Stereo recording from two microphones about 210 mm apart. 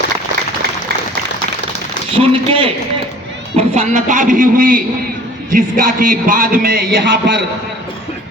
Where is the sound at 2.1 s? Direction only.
25° right (ahead or behind); by 7.4 s 55° right (ahead or behind).